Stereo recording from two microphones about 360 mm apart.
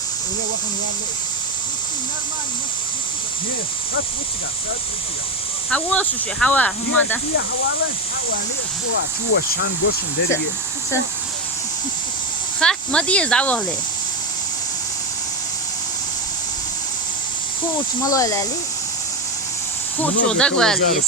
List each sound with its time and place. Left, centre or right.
5.7 s speech: centre
8.9 s speech: left
12.5 s speech: centre
18.0 s speech: centre
20.0 s speech: centre